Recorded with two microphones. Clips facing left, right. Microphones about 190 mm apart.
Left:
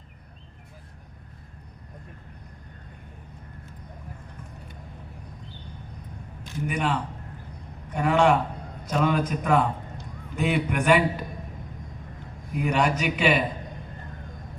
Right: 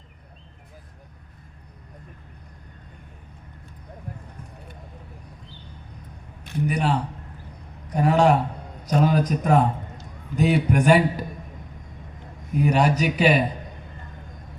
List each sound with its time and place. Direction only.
6.7 s a man's voice: 35° right (ahead or behind)
12.5 s a man's voice: 40° right (ahead or behind)